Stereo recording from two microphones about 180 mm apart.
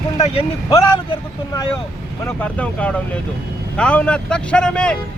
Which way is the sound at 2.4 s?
5° left (ahead or behind).